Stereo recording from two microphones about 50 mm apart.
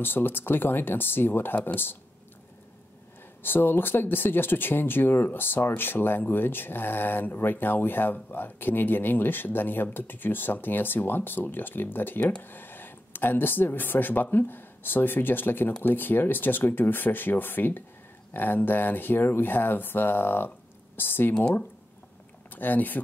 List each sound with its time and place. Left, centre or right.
0.0 s speech: left
3.4 s speech: left
22.5 s speech: left